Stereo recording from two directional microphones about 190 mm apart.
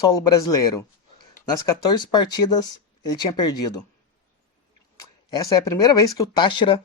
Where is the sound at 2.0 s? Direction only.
20° left (ahead or behind).